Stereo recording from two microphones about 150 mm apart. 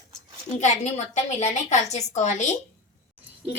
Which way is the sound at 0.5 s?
50° left (ahead or behind).